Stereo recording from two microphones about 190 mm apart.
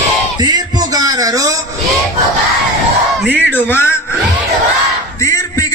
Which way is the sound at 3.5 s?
10° left (ahead or behind).